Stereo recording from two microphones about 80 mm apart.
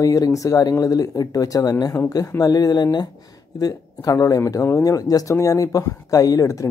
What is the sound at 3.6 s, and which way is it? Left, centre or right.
Speech, left.